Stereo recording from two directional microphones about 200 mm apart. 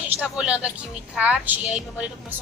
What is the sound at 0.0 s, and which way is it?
A woman's voice, 5° right (ahead or behind).